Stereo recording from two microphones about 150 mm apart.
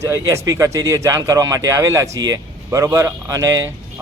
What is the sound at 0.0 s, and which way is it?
Speech, 20° right (ahead or behind).